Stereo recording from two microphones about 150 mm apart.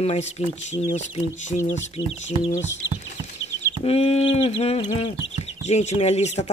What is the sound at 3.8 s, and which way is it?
Speech, 45° left (ahead or behind).